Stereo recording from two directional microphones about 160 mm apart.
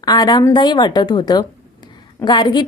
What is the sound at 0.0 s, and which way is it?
Speech, 25° left (ahead or behind).